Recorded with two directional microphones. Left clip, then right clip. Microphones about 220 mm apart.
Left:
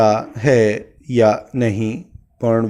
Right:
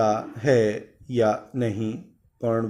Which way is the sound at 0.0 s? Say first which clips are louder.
Left 8 dB; 40° left (ahead or behind).